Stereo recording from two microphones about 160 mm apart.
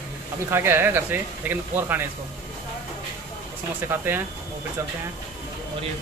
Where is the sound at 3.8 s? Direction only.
15° right (ahead or behind).